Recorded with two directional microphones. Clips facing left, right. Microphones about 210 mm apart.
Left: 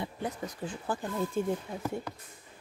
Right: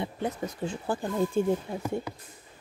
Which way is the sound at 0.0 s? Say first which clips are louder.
Right 4 dB; 25° right (ahead or behind).